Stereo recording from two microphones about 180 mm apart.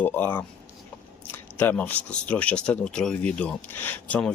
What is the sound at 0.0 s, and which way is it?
Speech, 10° left (ahead or behind).